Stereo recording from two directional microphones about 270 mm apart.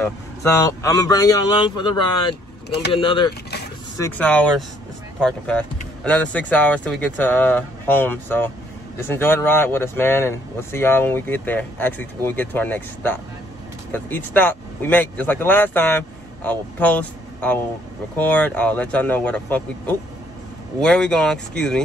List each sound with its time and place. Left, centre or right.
0.0 s speech: centre
2.9 s speech: centre
4.0 s speech: centre